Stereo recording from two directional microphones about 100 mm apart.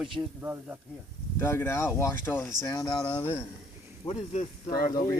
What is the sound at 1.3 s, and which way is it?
Speech, 25° left (ahead or behind).